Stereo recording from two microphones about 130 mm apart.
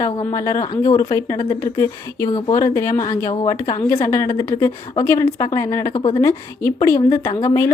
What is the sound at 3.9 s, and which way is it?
A woman's voice, 20° left (ahead or behind).